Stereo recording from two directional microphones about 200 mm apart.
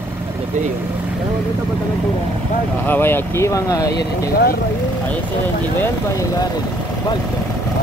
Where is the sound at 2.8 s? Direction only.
10° left (ahead or behind).